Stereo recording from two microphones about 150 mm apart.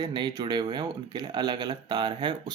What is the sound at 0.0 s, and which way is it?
Speech, 30° right (ahead or behind).